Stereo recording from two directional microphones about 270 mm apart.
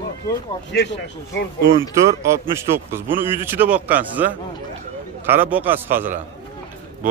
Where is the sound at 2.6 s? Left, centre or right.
Centre.